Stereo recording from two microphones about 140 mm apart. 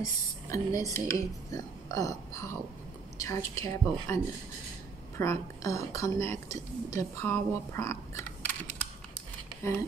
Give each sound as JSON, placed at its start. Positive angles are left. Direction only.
{"t": 0.5, "sound": "a woman's voice", "side_deg": 25}